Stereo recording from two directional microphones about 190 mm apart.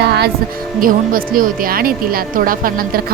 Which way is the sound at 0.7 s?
50° right (ahead or behind).